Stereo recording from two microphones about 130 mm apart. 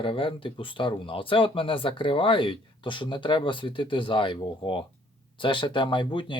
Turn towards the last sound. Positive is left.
turn(degrees=40)  # may be behind; listen again after turning